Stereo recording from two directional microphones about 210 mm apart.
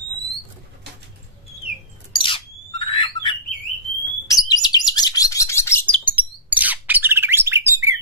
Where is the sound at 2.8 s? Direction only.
25° left (ahead or behind).